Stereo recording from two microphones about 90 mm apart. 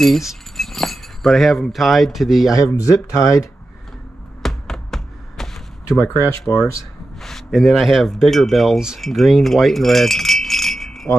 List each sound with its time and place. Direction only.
0.0 s speech: centre (ahead or behind)
2.5 s speech: 35° left (ahead or behind)
4.4 s tap: 5° left (ahead or behind)
6.5 s speech: 5° left (ahead or behind)